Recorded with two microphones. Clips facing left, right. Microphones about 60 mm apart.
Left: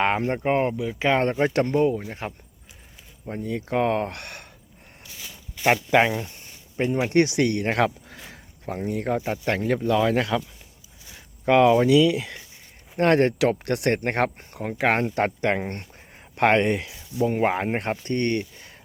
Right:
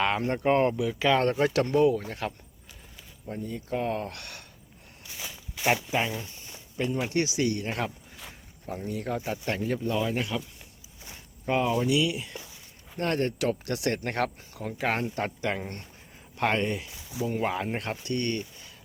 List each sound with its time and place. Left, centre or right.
0.0 s speech: left
0.3 s speech: left
2.0 s speech: left
3.4 s speech: left
5.9 s speech: left
6.1 s speech: left
6.7 s speech: left
7.1 s speech: left
8.6 s speech: left
9.5 s speech: left
11.4 s speech: left
13.0 s speech: left
17.3 s speech: left